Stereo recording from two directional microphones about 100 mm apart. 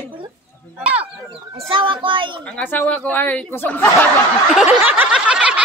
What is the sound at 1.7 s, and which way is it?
Speech, 55° right (ahead or behind).